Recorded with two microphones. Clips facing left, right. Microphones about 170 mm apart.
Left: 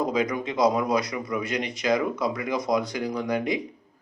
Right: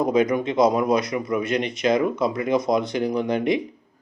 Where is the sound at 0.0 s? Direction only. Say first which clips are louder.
Right 5 dB; 25° right (ahead or behind).